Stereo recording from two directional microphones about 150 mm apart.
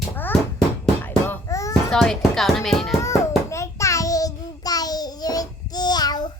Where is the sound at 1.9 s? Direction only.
5° left (ahead or behind).